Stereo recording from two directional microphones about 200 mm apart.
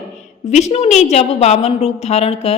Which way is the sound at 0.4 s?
35° left (ahead or behind).